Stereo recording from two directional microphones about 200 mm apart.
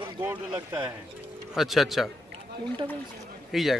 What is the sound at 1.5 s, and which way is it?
Speech, centre (ahead or behind).